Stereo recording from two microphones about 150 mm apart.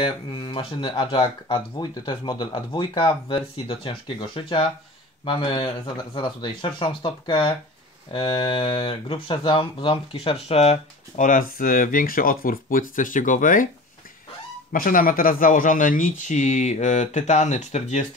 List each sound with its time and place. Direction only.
0.0 s speech: 35° left (ahead or behind); by 13.7 s 60° left (ahead or behind)
14.7 s speech: 70° left (ahead or behind); by 18.0 s 50° left (ahead or behind)